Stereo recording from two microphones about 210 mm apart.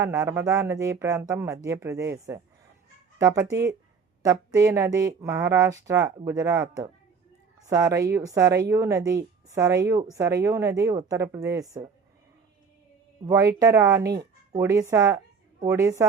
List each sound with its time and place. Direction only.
0.0 s speech: 15° right (ahead or behind)
13.2 s speech: 15° right (ahead or behind)